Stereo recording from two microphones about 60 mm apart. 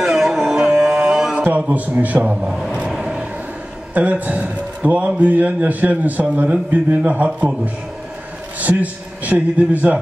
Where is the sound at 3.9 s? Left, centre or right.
Right.